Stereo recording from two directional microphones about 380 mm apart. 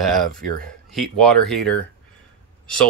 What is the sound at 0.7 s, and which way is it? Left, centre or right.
Speech, centre.